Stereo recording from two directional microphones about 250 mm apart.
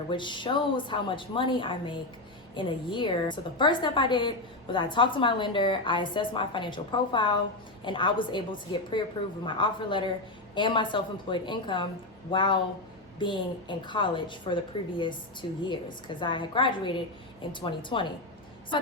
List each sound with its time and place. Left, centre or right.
0.1 s a woman's voice: centre